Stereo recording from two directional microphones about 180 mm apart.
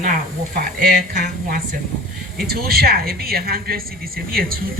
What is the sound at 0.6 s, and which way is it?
Speech, 55° right (ahead or behind).